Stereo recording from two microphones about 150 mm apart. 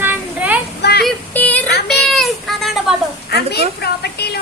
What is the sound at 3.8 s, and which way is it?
Speech, 90° left.